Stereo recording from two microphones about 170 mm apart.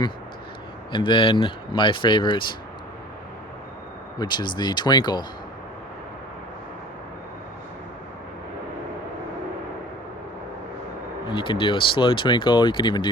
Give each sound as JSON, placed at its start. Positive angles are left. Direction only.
{"t": 0.9, "sound": "speech", "side_deg": 30}
{"t": 4.2, "sound": "speech", "side_deg": 25}
{"t": 11.3, "sound": "speech", "side_deg": 30}